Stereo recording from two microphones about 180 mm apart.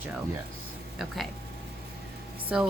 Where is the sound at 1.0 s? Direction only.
Centre (ahead or behind).